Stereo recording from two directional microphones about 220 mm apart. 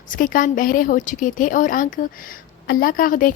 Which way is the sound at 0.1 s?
40° left (ahead or behind).